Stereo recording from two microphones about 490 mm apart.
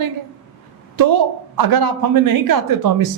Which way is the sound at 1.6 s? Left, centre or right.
Right.